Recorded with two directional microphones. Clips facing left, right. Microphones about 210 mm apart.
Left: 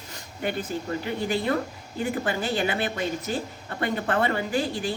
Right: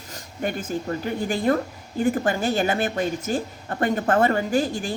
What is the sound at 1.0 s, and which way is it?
A woman's voice, 45° right (ahead or behind).